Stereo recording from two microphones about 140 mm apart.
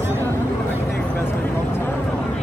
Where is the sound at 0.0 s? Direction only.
20° right (ahead or behind).